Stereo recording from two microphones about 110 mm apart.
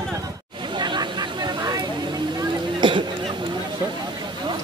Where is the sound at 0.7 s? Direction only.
40° right (ahead or behind).